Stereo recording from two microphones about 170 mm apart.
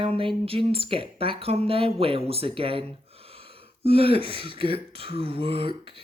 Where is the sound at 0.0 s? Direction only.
30° right (ahead or behind).